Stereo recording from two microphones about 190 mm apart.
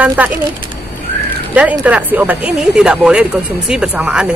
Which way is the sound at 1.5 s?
5° right (ahead or behind).